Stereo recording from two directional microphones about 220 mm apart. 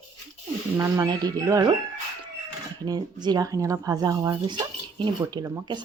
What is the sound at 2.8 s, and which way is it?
Speech, 20° right (ahead or behind).